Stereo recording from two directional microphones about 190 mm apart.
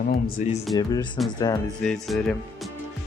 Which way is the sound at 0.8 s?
20° left (ahead or behind).